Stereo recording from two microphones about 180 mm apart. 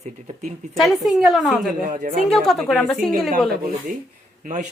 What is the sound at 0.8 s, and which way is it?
Speech, centre (ahead or behind).